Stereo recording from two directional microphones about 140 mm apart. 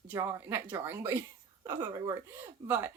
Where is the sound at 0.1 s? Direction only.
15° right (ahead or behind).